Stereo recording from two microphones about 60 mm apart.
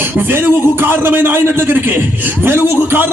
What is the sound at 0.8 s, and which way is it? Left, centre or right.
A man's voice, right.